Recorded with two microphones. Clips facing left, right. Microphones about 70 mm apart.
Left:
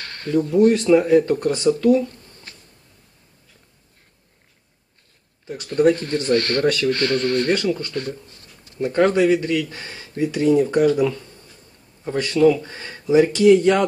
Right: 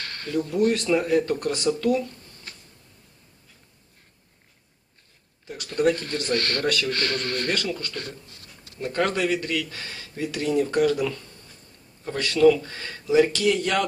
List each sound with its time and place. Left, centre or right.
0.3 s speech: left
5.6 s speech: left